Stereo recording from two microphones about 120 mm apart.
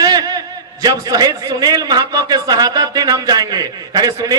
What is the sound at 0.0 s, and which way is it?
A man's voice, 35° right (ahead or behind).